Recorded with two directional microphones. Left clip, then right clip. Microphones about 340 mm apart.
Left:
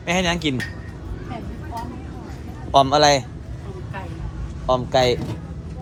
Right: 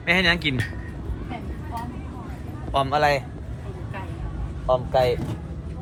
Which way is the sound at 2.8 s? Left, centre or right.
Centre.